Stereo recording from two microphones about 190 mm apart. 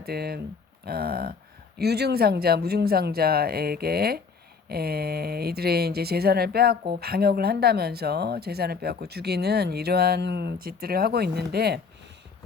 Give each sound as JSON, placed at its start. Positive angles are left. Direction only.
{"t": 0.0, "sound": "speech", "side_deg": -55}